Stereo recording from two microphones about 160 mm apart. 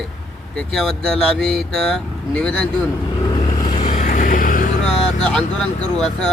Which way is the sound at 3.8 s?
45° left (ahead or behind).